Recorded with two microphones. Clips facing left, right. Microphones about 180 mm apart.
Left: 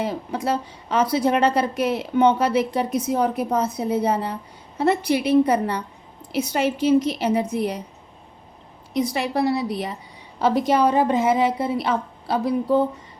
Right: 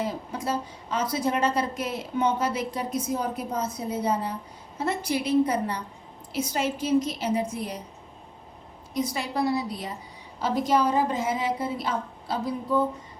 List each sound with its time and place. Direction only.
0.0 s a woman's voice: 70° left (ahead or behind)
8.9 s a woman's voice: 70° left (ahead or behind)